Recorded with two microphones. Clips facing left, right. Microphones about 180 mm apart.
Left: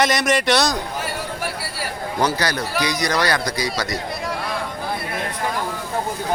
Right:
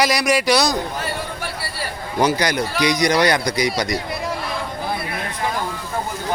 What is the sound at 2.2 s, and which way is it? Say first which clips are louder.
A man's voice: right 3 dB; 15° right (ahead or behind).